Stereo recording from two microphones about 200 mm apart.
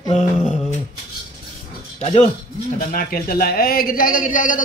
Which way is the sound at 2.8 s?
45° left (ahead or behind).